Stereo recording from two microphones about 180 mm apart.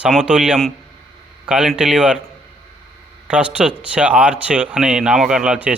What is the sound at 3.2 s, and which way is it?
A man's voice, 5° right (ahead or behind).